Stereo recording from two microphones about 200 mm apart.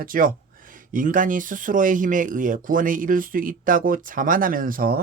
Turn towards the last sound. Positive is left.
turn(degrees=-45)  # may be behind; listen again after turning